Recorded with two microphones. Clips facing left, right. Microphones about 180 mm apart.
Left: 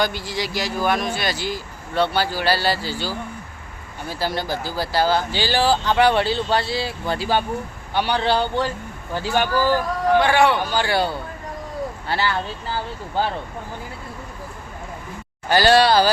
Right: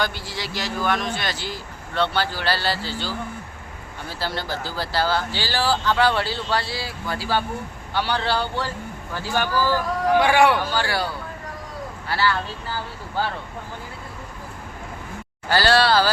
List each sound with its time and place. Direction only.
0.0 s speech: 15° left (ahead or behind)
10.2 s speech: 10° right (ahead or behind)
10.6 s speech: 20° left (ahead or behind)
15.4 s speech: 15° left (ahead or behind)